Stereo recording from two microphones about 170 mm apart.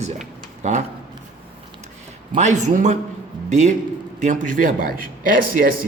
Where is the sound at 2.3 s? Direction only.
45° right (ahead or behind).